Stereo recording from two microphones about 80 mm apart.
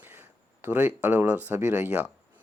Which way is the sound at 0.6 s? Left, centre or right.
Right.